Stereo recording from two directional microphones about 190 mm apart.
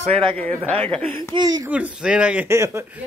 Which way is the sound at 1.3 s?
20° right (ahead or behind).